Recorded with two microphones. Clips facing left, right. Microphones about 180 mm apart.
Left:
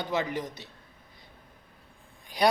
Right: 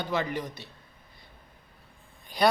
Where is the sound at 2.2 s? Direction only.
15° left (ahead or behind).